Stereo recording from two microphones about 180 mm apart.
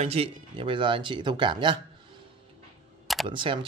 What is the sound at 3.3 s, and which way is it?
Speech, 25° right (ahead or behind).